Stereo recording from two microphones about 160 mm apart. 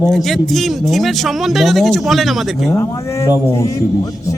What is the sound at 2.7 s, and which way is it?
Speech, 15° left (ahead or behind).